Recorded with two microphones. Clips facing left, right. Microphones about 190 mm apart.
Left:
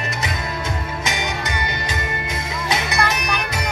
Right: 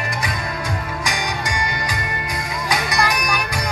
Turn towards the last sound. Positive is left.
turn(degrees=25)  # may be behind; listen again after turning